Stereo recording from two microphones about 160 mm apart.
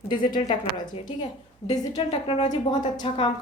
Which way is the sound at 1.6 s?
40° left (ahead or behind).